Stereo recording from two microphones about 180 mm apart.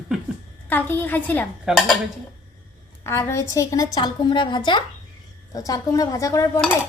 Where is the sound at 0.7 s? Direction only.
10° left (ahead or behind).